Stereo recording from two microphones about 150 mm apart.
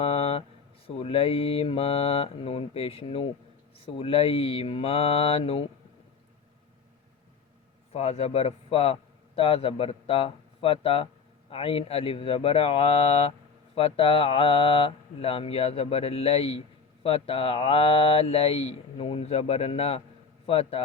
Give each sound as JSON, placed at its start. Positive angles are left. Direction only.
{"t": 0.0, "sound": "a sound", "side_deg": 40}
{"t": 0.9, "sound": "speech", "side_deg": 40}
{"t": 7.9, "sound": "a man's voice", "side_deg": 45}